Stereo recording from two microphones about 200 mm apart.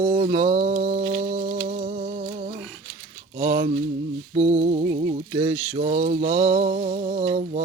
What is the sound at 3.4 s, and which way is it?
Mantra, 20° right (ahead or behind).